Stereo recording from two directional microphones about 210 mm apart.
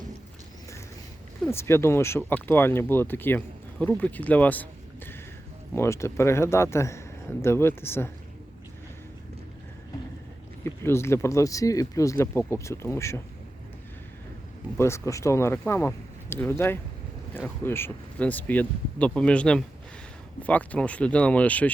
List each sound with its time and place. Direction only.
1.5 s speech: 10° left (ahead or behind)
5.7 s speech: 15° left (ahead or behind)
10.6 s speech: 10° left (ahead or behind)
14.8 s speech: 15° left (ahead or behind)